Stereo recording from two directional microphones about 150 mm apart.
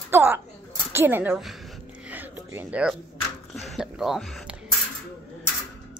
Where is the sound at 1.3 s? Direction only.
Centre (ahead or behind).